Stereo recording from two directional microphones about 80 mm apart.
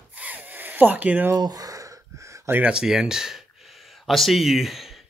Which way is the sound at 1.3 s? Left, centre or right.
Right.